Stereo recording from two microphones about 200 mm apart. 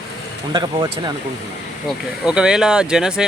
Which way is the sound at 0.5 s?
20° right (ahead or behind).